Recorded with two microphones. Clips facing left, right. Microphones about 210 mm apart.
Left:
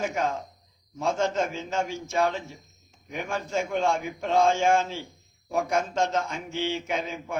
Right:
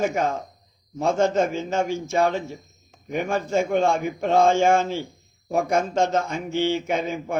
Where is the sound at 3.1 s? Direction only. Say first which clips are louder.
Right 6 dB; 55° right (ahead or behind).